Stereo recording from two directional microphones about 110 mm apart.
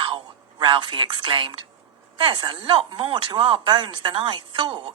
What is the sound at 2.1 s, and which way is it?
A woman's voice, 50° right (ahead or behind).